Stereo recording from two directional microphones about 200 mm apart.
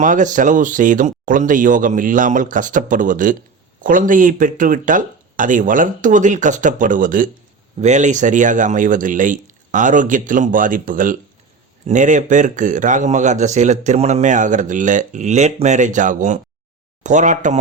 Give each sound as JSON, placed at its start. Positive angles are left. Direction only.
{"t": 0.0, "sound": "a man's voice", "side_deg": -40}